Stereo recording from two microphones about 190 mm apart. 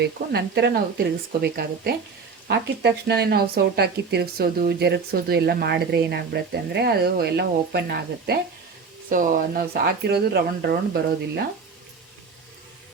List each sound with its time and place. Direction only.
0.0 s speech: 60° right (ahead or behind)
9.0 s speech: 45° right (ahead or behind)